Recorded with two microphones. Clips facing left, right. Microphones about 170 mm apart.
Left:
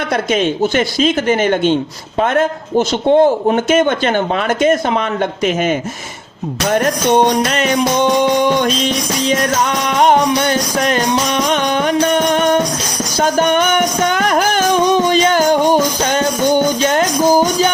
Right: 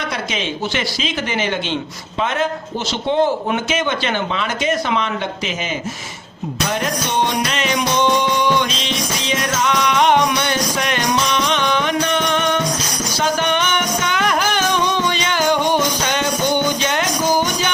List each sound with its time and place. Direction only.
0.1 s a man's voice: 50° left (ahead or behind)
6.7 s music: 50° left (ahead or behind)